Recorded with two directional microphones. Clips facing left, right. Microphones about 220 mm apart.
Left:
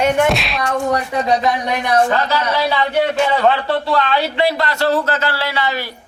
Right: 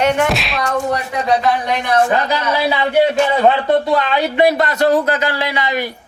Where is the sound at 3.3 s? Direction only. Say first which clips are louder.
Right 3 dB; 20° right (ahead or behind).